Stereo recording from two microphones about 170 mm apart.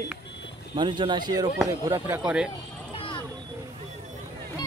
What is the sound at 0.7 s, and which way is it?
Speech, 25° right (ahead or behind).